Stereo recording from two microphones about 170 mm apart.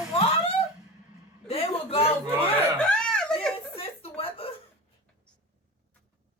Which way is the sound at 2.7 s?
5° left (ahead or behind).